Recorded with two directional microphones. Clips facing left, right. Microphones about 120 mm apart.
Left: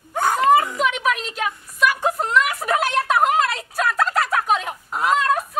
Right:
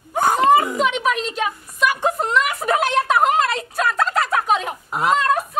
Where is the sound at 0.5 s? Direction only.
5° right (ahead or behind).